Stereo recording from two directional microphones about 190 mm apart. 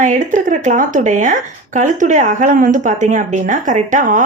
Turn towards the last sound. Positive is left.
turn(degrees=-40)  # may be behind; listen again after turning